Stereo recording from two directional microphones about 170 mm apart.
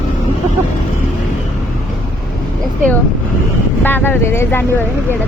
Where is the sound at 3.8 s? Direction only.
10° left (ahead or behind).